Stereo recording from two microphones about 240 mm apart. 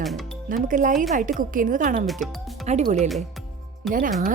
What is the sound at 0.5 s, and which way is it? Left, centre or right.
Speech, right.